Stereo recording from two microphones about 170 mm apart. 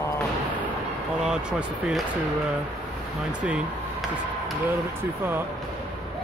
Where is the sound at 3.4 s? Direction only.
5° right (ahead or behind).